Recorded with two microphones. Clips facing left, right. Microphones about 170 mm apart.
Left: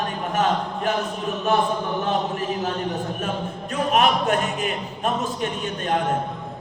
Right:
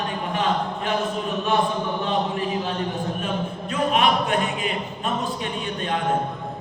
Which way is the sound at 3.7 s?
45° left (ahead or behind).